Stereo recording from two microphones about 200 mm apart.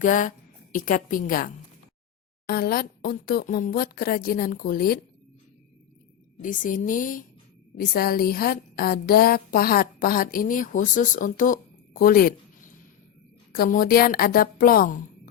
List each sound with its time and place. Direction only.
0.0 s a woman's voice: 40° left (ahead or behind)
6.4 s a woman's voice: 40° left (ahead or behind)
13.5 s a woman's voice: 45° left (ahead or behind)